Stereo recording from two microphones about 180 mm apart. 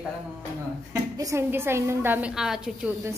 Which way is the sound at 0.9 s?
20° right (ahead or behind).